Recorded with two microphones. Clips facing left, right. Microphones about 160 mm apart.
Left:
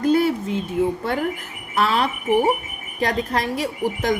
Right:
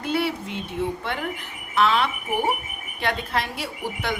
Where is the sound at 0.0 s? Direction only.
45° left (ahead or behind).